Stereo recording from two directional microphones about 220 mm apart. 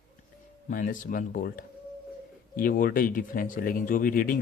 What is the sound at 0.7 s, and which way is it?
Speech, 35° left (ahead or behind).